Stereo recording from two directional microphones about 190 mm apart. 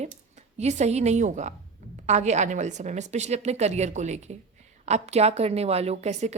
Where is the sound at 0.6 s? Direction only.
35° right (ahead or behind).